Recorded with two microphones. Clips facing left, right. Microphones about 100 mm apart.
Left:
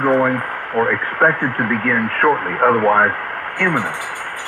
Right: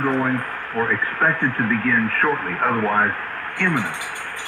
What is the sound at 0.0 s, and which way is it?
Speech, 50° left (ahead or behind).